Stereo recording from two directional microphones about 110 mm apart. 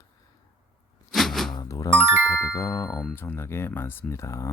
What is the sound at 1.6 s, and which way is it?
Music, 30° left (ahead or behind).